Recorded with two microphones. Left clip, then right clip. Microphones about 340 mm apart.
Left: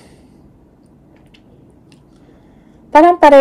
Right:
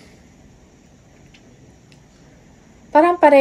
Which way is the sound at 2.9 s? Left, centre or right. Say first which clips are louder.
Left 5 dB; left.